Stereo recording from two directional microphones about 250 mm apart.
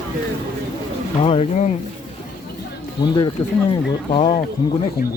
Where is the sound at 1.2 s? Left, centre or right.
Left.